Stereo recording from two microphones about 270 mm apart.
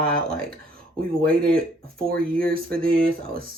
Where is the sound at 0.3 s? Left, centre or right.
Centre.